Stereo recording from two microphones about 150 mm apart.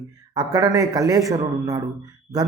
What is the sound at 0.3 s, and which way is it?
A man's voice, 25° right (ahead or behind).